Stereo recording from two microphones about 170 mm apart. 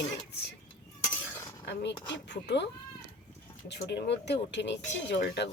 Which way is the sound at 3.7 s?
85° left.